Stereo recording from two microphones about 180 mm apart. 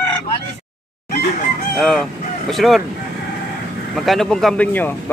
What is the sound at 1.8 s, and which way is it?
Speech, centre (ahead or behind).